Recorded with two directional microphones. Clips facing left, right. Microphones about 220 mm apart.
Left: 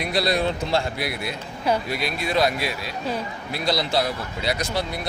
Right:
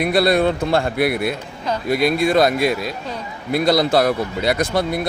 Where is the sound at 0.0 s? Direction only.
55° right (ahead or behind).